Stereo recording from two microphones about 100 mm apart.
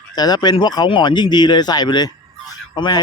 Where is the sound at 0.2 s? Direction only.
45° left (ahead or behind).